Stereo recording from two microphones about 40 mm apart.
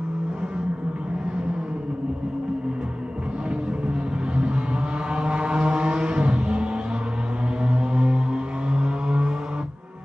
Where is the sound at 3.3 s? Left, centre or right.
Right.